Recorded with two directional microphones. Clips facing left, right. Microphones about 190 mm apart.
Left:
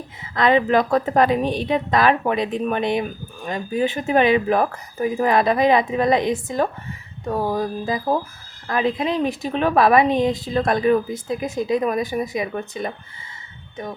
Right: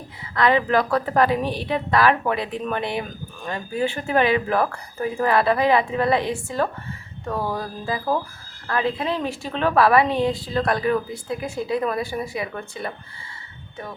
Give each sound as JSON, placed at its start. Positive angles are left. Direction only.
{"t": 0.3, "sound": "a woman's voice", "side_deg": 20}
{"t": 7.3, "sound": "a sound", "side_deg": 15}
{"t": 8.6, "sound": "a woman's voice", "side_deg": 15}